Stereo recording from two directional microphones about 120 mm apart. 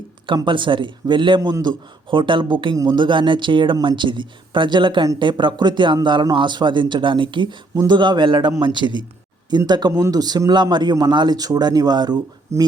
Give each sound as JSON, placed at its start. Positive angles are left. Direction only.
{"t": 0.4, "sound": "a man's voice", "side_deg": -45}
{"t": 12.5, "sound": "speech", "side_deg": -25}